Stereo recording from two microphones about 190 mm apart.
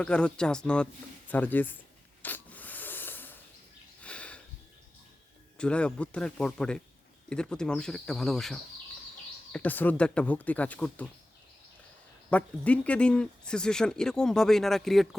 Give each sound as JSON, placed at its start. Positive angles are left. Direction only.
{"t": 0.0, "sound": "speech", "side_deg": 5}
{"t": 2.2, "sound": "a sound", "side_deg": 10}
{"t": 5.5, "sound": "speech", "side_deg": 5}
{"t": 12.3, "sound": "speech", "side_deg": 5}